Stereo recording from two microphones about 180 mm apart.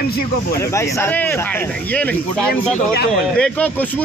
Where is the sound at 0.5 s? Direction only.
15° left (ahead or behind).